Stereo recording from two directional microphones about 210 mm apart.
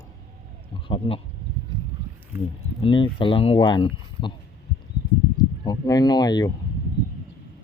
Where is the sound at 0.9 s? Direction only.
25° left (ahead or behind).